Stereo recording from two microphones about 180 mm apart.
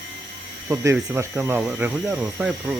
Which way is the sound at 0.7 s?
15° right (ahead or behind).